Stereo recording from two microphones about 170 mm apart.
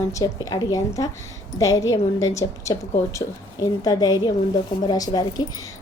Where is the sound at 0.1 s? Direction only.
20° left (ahead or behind).